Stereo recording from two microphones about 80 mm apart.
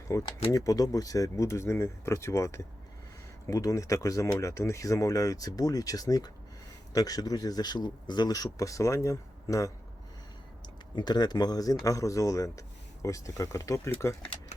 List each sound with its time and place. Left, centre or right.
0.1 s speech: left
10.9 s speech: left